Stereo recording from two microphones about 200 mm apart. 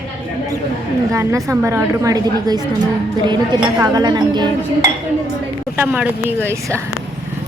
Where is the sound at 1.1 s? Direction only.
15° right (ahead or behind).